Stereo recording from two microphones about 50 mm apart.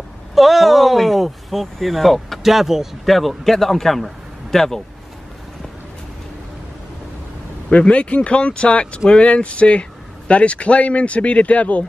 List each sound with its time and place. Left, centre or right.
0.3 s speech: centre
7.7 s speech: left